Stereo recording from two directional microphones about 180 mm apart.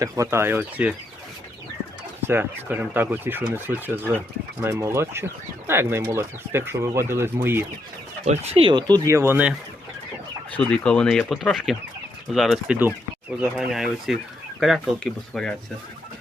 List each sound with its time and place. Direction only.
0.0 s speech: 15° right (ahead or behind)
2.2 s speech: 10° right (ahead or behind)
8.2 s speech: 35° right (ahead or behind)
9.0 s speech: 15° right (ahead or behind)
10.5 s speech: 5° left (ahead or behind)